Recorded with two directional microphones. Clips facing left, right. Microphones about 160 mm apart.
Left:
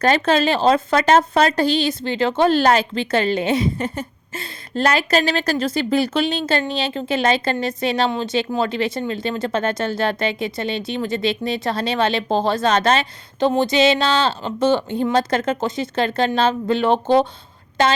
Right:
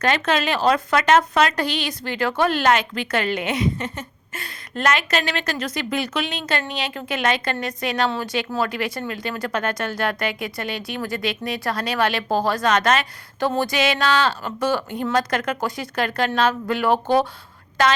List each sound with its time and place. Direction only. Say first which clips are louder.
0.0 s a woman's voice: left 4 dB; 35° left (ahead or behind)